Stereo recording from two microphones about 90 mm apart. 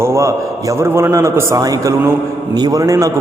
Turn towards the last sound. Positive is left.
turn(degrees=-40)  # may be behind; listen again after turning